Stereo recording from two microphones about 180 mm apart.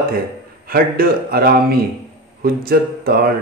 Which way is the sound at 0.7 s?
55° right (ahead or behind).